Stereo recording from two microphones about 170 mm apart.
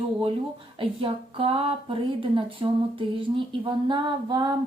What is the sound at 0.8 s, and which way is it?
A woman's voice, 35° right (ahead or behind).